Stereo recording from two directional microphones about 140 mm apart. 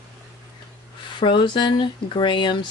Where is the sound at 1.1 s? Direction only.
35° left (ahead or behind).